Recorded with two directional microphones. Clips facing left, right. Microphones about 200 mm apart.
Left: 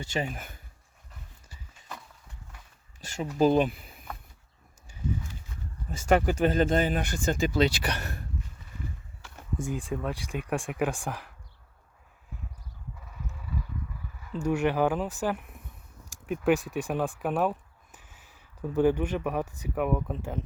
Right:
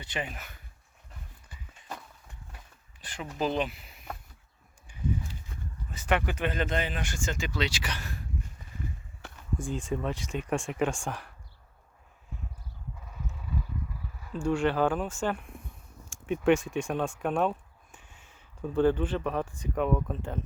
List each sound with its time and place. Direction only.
0.0 s speech: 45° left (ahead or behind)
3.0 s speech: 45° left (ahead or behind)
5.9 s speech: 45° left (ahead or behind); by 8.2 s 60° left (ahead or behind)
9.6 s speech: 5° left (ahead or behind)
13.1 s a sound: centre (ahead or behind)
14.3 s speech: 20° left (ahead or behind)
16.2 s speech: centre (ahead or behind)